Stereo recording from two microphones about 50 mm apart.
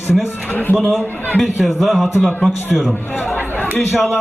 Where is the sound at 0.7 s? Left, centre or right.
Left.